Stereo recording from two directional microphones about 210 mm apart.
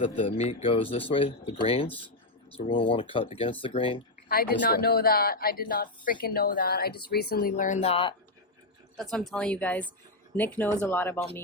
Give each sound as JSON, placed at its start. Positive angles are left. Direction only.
{"t": 0.0, "sound": "speech", "side_deg": 25}
{"t": 4.3, "sound": "speech", "side_deg": 45}
{"t": 9.0, "sound": "a woman's voice", "side_deg": 0}